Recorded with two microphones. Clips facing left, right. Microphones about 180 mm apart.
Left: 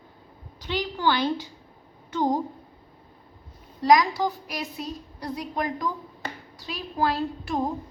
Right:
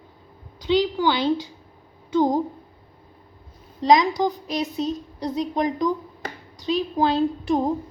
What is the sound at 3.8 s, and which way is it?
A woman's voice, 20° right (ahead or behind).